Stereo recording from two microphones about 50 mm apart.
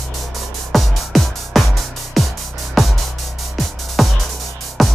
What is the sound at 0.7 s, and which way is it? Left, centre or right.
Music, centre.